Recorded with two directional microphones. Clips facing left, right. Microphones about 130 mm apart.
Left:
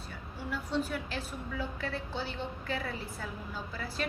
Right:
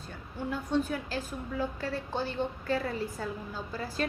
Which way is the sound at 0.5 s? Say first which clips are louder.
Right 3 dB; 50° right (ahead or behind).